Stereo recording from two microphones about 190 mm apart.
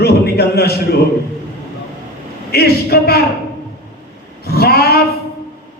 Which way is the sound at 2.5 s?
55° left (ahead or behind).